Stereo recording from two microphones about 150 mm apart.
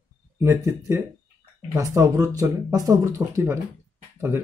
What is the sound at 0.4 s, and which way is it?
Speech, 20° right (ahead or behind).